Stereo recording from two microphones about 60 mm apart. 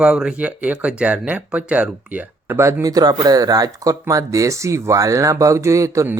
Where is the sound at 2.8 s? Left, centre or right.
Right.